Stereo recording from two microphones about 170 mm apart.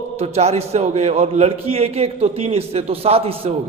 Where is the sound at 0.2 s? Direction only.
35° right (ahead or behind).